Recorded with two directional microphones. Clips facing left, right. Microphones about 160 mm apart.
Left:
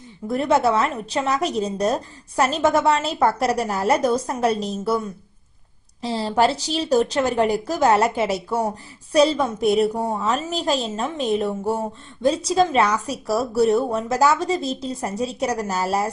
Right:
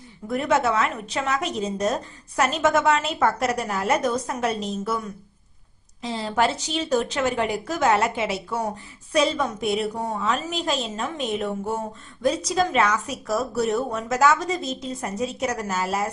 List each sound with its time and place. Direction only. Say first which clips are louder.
0.3 s a woman's voice: left 3 dB; 30° left (ahead or behind)
6.0 s a woman's voice: left 4 dB; 35° left (ahead or behind)